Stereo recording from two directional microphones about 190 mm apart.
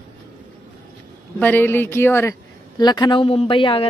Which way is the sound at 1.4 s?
10° left (ahead or behind).